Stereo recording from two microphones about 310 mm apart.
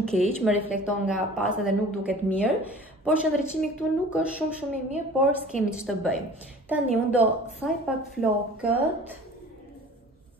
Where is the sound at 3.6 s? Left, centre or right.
Centre.